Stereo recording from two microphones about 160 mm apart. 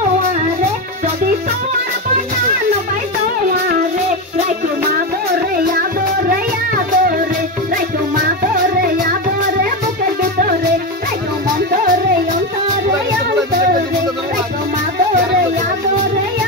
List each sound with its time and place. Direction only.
5.6 s music: 65° right (ahead or behind)